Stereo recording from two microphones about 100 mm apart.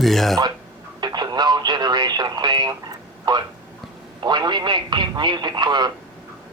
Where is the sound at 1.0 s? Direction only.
45° right (ahead or behind).